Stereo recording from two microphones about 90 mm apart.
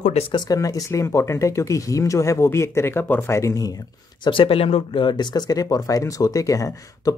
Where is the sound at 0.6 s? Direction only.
40° left (ahead or behind).